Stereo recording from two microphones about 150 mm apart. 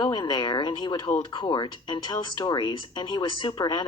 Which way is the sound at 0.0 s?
30° left (ahead or behind).